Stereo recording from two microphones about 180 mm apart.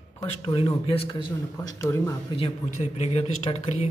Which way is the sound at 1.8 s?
15° left (ahead or behind).